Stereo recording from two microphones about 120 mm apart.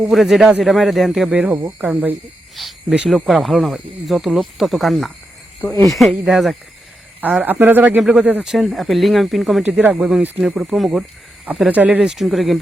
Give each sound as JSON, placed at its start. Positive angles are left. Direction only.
{"t": 0.0, "sound": "speech", "side_deg": 0}
{"t": 2.6, "sound": "speech", "side_deg": 0}
{"t": 7.2, "sound": "speech", "side_deg": -15}
{"t": 8.5, "sound": "speech", "side_deg": 0}
{"t": 9.6, "sound": "speech", "side_deg": -10}